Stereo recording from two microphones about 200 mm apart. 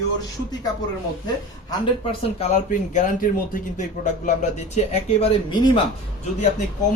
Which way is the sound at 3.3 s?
45° left (ahead or behind).